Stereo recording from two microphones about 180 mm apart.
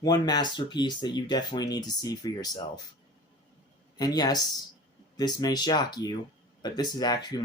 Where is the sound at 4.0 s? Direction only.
20° left (ahead or behind).